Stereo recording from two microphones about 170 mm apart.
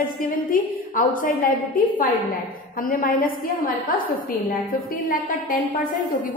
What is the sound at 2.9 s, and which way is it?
Speech, 55° left (ahead or behind).